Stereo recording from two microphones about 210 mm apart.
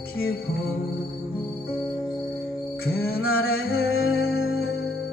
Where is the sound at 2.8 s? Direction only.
50° left (ahead or behind).